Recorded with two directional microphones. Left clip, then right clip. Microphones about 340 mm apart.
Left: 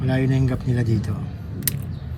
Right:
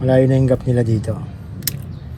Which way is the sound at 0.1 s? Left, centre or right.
Centre.